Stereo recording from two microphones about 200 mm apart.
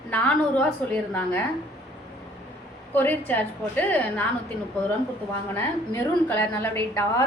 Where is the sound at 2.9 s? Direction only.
10° left (ahead or behind).